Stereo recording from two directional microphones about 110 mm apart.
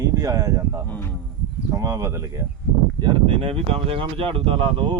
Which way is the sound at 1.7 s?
30° right (ahead or behind).